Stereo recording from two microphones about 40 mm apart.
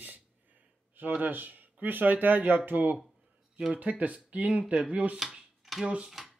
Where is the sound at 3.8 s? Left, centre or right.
Right.